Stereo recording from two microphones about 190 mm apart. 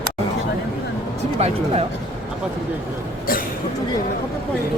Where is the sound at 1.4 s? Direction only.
30° right (ahead or behind).